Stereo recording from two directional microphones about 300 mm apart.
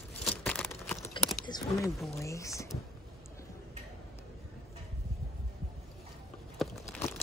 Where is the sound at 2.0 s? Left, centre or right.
Centre.